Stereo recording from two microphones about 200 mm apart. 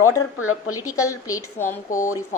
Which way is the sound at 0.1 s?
90° left.